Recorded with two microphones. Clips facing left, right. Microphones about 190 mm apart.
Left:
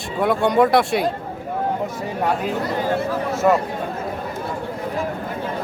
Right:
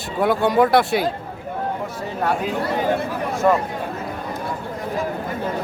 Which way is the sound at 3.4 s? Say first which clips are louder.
Left 1 dB; 5° left (ahead or behind).